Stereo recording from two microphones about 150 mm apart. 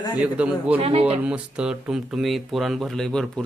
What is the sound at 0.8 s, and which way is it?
Speech, 45° right (ahead or behind).